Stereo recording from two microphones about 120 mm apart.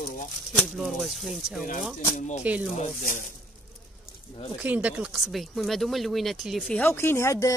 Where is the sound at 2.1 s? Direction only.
80° left.